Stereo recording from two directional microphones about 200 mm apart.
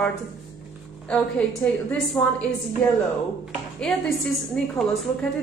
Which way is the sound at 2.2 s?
10° left (ahead or behind).